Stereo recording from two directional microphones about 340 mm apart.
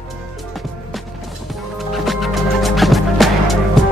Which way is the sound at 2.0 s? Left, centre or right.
Centre.